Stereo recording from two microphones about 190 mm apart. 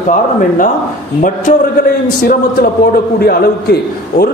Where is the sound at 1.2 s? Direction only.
45° left (ahead or behind).